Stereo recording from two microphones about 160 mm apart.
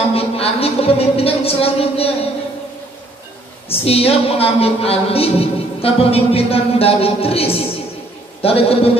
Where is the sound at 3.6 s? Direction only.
40° left (ahead or behind).